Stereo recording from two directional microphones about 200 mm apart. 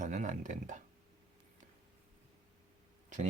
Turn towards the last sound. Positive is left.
turn(degrees=-35)  # may be behind; listen again after turning